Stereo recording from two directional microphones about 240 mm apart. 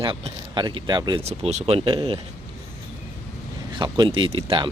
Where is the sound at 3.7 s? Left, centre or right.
Centre.